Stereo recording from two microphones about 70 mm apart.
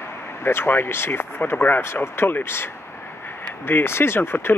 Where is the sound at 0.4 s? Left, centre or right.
Left.